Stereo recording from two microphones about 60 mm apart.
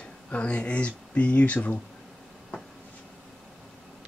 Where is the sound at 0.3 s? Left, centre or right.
Centre.